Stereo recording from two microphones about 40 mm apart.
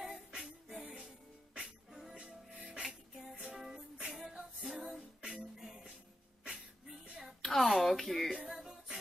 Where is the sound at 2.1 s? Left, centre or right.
Right.